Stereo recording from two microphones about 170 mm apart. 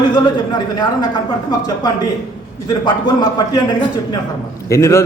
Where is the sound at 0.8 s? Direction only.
25° left (ahead or behind).